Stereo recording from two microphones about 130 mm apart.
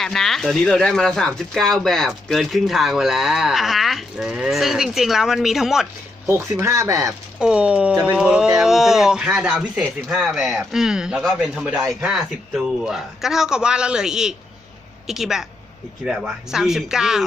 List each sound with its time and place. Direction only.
0.0 s speech: centre (ahead or behind)
6.2 s speech: 20° right (ahead or behind)
7.3 s speech: 5° right (ahead or behind)